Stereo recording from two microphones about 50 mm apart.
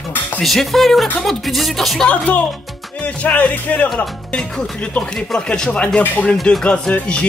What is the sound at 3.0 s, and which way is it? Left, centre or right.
Music, left.